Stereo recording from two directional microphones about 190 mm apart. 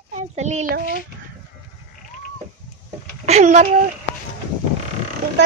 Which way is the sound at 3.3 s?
40° right (ahead or behind).